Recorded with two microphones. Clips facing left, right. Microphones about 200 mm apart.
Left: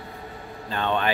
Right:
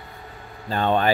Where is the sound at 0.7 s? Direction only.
40° right (ahead or behind).